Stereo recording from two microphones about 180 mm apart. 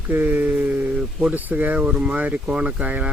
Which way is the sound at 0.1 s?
10° right (ahead or behind).